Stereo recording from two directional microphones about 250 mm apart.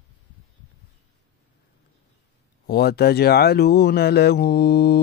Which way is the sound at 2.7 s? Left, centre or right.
Left.